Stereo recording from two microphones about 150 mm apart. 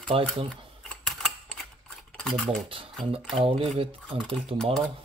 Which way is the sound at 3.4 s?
40° right (ahead or behind).